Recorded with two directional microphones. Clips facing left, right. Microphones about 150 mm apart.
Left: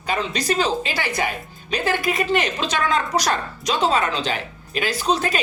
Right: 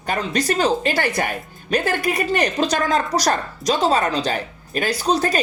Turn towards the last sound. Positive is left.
turn(degrees=-40)  # may be behind; listen again after turning